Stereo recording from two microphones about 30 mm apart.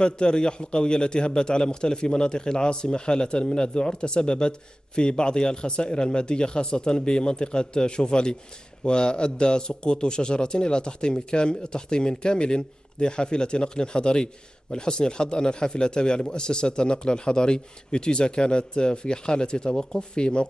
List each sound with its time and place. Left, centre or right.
0.0 s a man's voice: left